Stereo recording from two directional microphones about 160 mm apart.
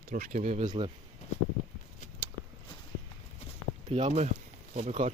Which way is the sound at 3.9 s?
45° right (ahead or behind).